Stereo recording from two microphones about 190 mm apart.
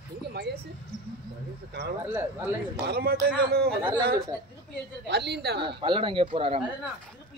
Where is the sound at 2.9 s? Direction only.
55° right (ahead or behind).